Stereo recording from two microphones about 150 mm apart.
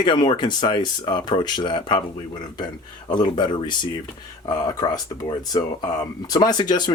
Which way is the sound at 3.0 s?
30° left (ahead or behind).